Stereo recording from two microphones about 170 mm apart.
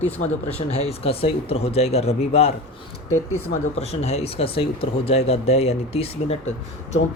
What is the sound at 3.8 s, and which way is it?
Speech, 40° left (ahead or behind).